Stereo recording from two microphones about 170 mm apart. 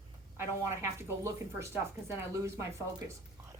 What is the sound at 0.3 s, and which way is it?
A woman's voice, 15° right (ahead or behind).